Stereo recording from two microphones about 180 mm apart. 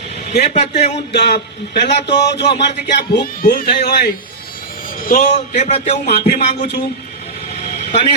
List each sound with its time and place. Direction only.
0.3 s speech: 35° left (ahead or behind)
1.2 s a man's voice: 65° left (ahead or behind)
3.4 s a man's voice: 50° left (ahead or behind)
5.0 s speech: 45° left (ahead or behind)
6.1 s a sound: 55° left (ahead or behind)